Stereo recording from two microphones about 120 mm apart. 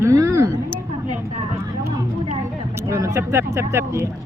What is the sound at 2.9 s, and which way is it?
Speech, 25° right (ahead or behind).